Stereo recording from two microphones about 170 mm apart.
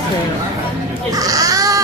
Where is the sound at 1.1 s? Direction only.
20° right (ahead or behind).